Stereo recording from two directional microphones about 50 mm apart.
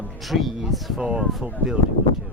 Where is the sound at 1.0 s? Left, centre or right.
Centre.